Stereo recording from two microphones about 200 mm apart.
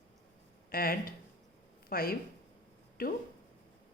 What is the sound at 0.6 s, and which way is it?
A woman's voice, 45° left (ahead or behind).